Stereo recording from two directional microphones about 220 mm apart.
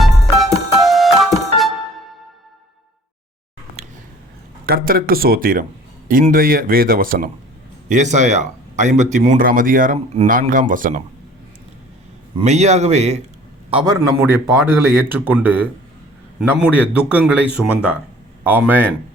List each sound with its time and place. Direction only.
0.0 s music: centre (ahead or behind)
4.6 s speech: 40° right (ahead or behind)
12.4 s a man's voice: 30° right (ahead or behind)
14.2 s a man's voice: 10° right (ahead or behind)